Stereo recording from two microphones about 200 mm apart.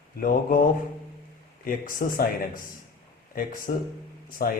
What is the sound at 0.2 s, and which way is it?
Speech, 45° left (ahead or behind).